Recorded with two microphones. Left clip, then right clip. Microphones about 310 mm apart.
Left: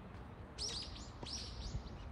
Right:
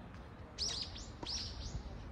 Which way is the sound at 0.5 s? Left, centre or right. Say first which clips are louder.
Right 4 dB; centre.